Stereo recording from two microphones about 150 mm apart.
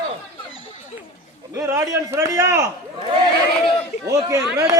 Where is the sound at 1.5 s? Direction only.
20° right (ahead or behind).